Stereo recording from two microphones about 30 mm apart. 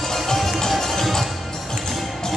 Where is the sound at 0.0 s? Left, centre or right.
Centre.